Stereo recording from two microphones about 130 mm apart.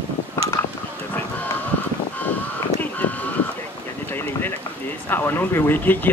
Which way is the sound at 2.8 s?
10° left (ahead or behind).